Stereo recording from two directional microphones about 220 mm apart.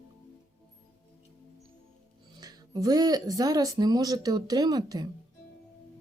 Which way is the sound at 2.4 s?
15° right (ahead or behind).